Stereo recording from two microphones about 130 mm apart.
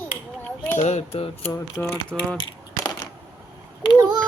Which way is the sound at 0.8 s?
50° left (ahead or behind).